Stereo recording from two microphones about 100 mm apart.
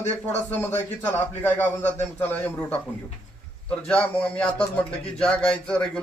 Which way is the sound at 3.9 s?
10° left (ahead or behind).